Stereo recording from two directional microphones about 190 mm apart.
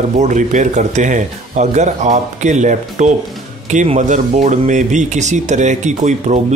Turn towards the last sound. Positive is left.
turn(degrees=-40)  # may be behind; listen again after turning